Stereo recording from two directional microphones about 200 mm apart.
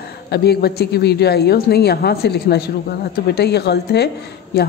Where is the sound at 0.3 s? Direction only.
55° left (ahead or behind).